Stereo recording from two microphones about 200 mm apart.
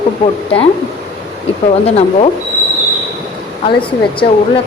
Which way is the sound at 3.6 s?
25° left (ahead or behind).